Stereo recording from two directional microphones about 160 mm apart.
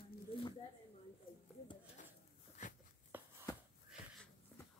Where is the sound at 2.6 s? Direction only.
50° left (ahead or behind).